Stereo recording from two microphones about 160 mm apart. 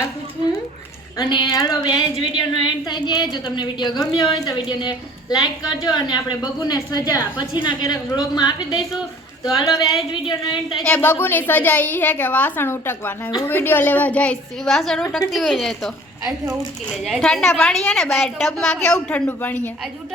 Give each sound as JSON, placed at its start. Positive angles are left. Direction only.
{"t": 1.2, "sound": "a woman's voice", "side_deg": 25}
{"t": 10.8, "sound": "a woman's voice", "side_deg": 5}
{"t": 17.0, "sound": "a woman's voice", "side_deg": 0}